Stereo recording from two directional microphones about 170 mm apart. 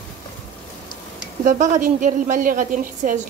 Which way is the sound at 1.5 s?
50° right (ahead or behind).